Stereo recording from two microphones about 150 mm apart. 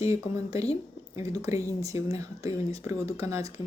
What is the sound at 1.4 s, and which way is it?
Speech, 20° right (ahead or behind).